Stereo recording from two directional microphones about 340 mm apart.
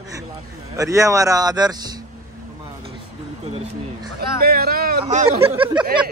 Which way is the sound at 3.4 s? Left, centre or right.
Centre.